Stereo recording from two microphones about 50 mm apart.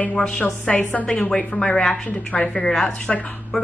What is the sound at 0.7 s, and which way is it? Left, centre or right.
Speech, left.